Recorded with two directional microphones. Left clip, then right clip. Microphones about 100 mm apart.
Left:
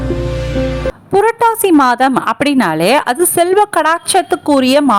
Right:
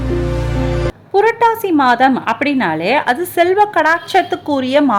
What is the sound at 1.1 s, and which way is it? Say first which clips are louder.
A woman's voice: left 1 dB; 60° left (ahead or behind).